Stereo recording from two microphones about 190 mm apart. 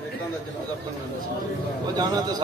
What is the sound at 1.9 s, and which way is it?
Speech, 20° right (ahead or behind).